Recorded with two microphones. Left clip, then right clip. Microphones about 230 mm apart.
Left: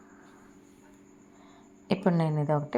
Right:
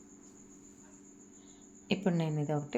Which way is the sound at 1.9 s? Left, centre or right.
Centre.